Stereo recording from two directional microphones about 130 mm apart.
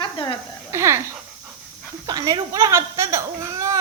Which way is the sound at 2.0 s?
30° right (ahead or behind).